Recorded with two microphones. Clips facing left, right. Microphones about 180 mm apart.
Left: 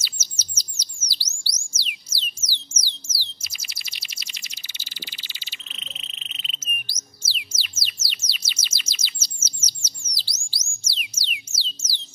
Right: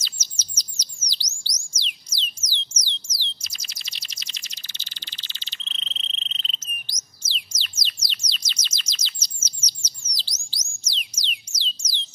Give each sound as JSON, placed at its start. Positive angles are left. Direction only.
{"t": 0.0, "sound": "bird", "side_deg": 10}
{"t": 3.1, "sound": "chirp", "side_deg": 10}
{"t": 10.1, "sound": "music", "side_deg": 10}